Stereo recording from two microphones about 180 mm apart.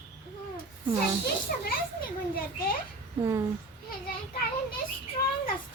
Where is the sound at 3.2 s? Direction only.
15° right (ahead or behind).